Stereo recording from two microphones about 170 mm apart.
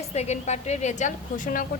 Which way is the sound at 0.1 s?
40° left (ahead or behind).